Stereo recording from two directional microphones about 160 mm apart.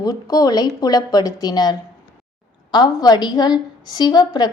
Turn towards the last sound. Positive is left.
turn(degrees=25)  # may be behind; listen again after turning